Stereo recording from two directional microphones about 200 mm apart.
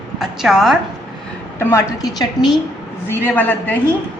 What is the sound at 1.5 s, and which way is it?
A woman's voice, 10° left (ahead or behind).